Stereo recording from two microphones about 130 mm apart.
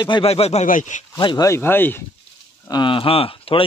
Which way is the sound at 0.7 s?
80° left.